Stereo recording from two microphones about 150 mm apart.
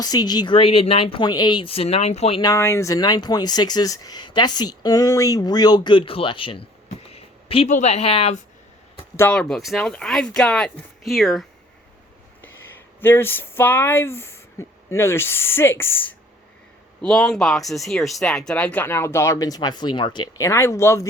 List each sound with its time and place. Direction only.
0.0 s speech: 25° left (ahead or behind); by 2.4 s 45° left (ahead or behind)
2.4 s speech: 20° left (ahead or behind); by 6.7 s 35° left (ahead or behind)
7.1 s a sound: 40° left (ahead or behind)
7.7 s speech: 50° left (ahead or behind)
9.3 s speech: 5° left (ahead or behind)
13.0 s speech: 15° left (ahead or behind)
17.0 s speech: 5° left (ahead or behind)